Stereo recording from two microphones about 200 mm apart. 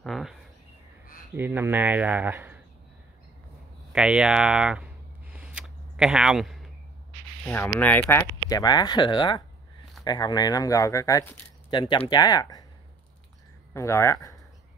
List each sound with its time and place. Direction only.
0.0 s a sound: centre (ahead or behind)
1.3 s speech: 10° right (ahead or behind)
3.9 s speech: 5° right (ahead or behind)
5.3 s a sound: 5° right (ahead or behind)
7.4 s speech: 10° left (ahead or behind)
8.5 s speech: 20° left (ahead or behind)
13.7 s speech: 15° left (ahead or behind)